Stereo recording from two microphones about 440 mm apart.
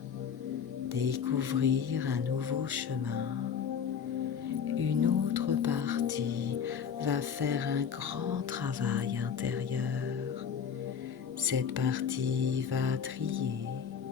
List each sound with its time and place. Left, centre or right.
0.9 s music: right
4.8 s music: right
11.9 s music: right